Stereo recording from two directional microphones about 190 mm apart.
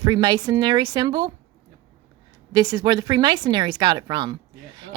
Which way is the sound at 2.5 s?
20° right (ahead or behind).